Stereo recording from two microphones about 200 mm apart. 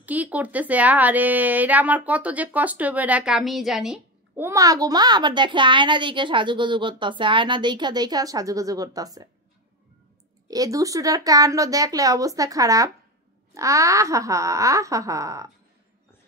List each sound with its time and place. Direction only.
0.0 s a woman's voice: 10° right (ahead or behind)
4.5 s speech: 15° right (ahead or behind)
10.5 s a woman's voice: 15° right (ahead or behind)